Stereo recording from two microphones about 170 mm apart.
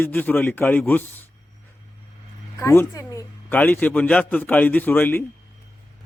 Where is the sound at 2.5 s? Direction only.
15° left (ahead or behind).